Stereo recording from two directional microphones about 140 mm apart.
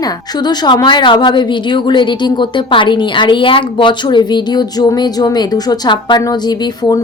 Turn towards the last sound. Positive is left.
turn(degrees=30)  # may be behind; listen again after turning